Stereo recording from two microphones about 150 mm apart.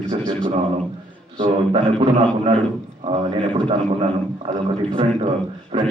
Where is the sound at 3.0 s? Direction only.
35° right (ahead or behind).